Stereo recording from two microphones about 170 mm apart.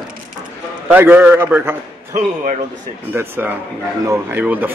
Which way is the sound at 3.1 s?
10° right (ahead or behind).